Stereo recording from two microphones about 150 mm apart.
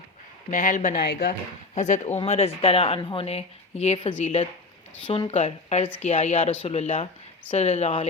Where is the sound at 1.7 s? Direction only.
50° left (ahead or behind).